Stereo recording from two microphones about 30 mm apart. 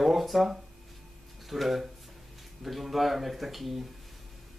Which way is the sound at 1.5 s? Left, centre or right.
Centre.